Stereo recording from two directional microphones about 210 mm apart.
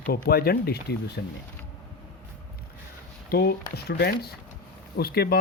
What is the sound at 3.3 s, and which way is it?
Speech, 50° left (ahead or behind).